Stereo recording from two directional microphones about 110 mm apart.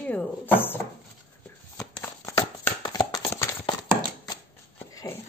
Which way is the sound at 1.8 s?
25° left (ahead or behind).